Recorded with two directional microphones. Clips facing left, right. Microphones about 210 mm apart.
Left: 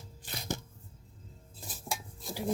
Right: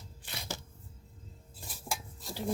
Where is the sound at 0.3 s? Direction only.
50° left (ahead or behind).